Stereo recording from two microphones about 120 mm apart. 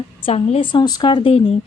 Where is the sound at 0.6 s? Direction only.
40° left (ahead or behind).